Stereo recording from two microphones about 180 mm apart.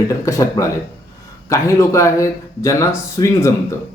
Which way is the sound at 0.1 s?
15° left (ahead or behind).